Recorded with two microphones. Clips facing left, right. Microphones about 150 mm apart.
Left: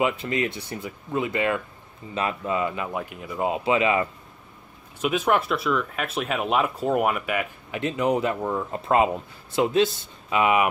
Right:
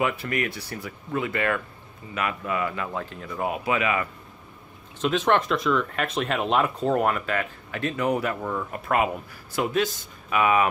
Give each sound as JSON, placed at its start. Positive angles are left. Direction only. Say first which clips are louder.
{"t": 0.0, "sound": "speech", "louder": "left 2 dB", "side_deg": 20}
{"t": 5.0, "sound": "speech", "louder": "even", "side_deg": 10}